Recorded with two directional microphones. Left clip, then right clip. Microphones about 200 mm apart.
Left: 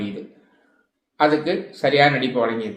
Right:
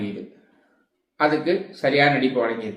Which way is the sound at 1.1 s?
15° left (ahead or behind).